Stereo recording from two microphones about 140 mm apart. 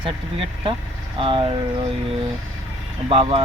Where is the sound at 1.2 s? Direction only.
40° right (ahead or behind).